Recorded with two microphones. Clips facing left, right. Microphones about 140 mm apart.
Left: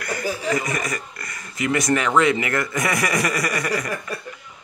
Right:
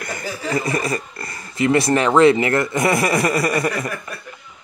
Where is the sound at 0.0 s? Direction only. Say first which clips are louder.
Left 2 dB; 25° right (ahead or behind).